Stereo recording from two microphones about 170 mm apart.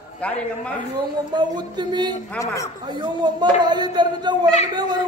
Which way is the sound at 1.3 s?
25° right (ahead or behind).